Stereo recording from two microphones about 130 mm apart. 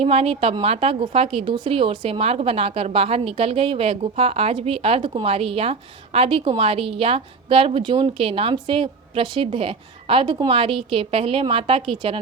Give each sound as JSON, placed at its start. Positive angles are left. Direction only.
{"t": 0.0, "sound": "a woman's voice", "side_deg": -50}